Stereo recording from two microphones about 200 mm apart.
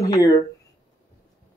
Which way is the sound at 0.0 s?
15° left (ahead or behind).